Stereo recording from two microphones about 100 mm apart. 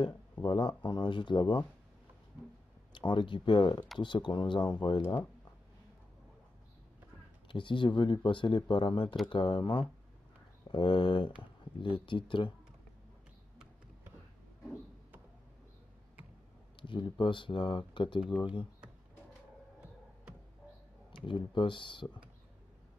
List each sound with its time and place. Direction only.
0.0 s speech: 55° left (ahead or behind)
2.9 s speech: 55° left (ahead or behind)
7.4 s speech: 55° left (ahead or behind)
16.7 s speech: 55° left (ahead or behind)
21.3 s speech: 55° left (ahead or behind)